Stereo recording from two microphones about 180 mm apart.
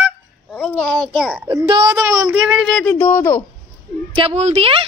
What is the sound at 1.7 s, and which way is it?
Speech, 25° right (ahead or behind).